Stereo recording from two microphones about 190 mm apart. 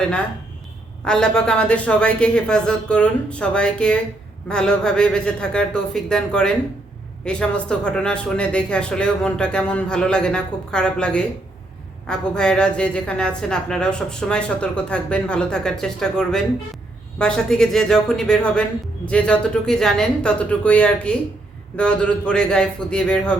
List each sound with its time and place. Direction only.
1.0 s a woman's voice: 5° left (ahead or behind)